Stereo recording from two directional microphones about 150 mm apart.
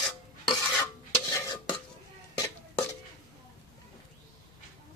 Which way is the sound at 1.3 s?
25° left (ahead or behind).